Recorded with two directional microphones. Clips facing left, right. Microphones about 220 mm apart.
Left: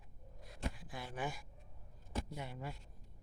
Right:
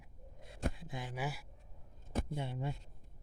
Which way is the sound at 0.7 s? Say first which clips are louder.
Right 2 dB; 20° right (ahead or behind).